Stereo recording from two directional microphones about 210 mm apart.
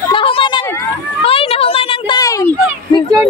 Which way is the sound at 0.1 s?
25° left (ahead or behind).